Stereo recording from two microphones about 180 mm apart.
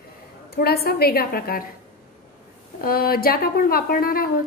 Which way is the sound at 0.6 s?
60° left (ahead or behind).